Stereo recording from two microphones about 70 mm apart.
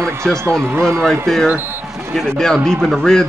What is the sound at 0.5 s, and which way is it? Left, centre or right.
Speech, right.